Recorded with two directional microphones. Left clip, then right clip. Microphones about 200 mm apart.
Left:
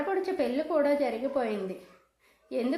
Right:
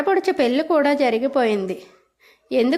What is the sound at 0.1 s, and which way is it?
A woman's voice, 40° right (ahead or behind).